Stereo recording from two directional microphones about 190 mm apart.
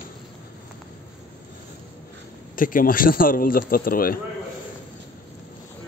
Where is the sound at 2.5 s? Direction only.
45° left (ahead or behind).